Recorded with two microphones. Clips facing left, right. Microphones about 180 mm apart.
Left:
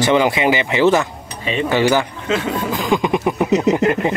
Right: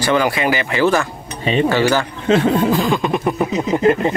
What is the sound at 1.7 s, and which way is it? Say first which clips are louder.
Beatboxing: left 1 dB; 15° left (ahead or behind).